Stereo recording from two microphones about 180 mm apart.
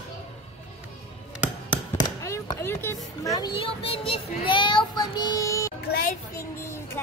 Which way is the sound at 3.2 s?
20° left (ahead or behind).